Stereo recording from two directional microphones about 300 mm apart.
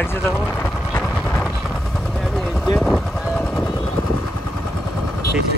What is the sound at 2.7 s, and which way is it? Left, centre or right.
Cattle, centre.